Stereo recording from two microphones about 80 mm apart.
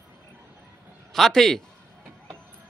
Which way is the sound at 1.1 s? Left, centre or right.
Centre.